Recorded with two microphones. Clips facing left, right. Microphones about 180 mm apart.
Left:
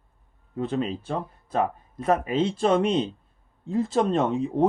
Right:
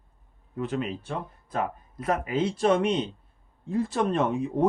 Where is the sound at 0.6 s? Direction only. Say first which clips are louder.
Left 3 dB; 30° left (ahead or behind).